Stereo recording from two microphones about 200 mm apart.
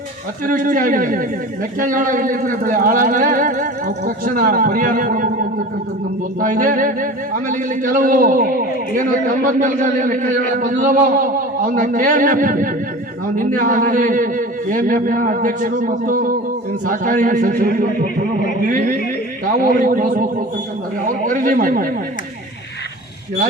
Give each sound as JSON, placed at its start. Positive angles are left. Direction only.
{"t": 0.4, "sound": "speech", "side_deg": -40}
{"t": 6.4, "sound": "a man's voice", "side_deg": -40}
{"t": 21.3, "sound": "speech", "side_deg": -40}